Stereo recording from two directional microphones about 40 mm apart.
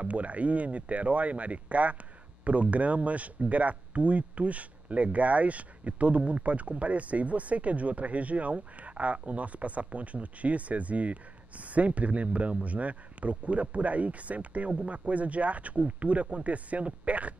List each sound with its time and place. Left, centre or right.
0.0 s speech: right